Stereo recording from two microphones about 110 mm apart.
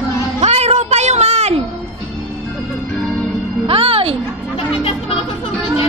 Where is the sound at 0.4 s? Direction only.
80° right.